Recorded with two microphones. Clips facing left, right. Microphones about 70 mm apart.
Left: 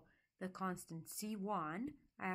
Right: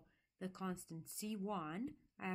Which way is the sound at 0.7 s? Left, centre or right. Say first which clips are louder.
Left 1 dB; centre.